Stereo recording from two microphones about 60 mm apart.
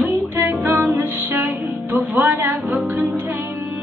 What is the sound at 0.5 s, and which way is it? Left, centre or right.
Music, right.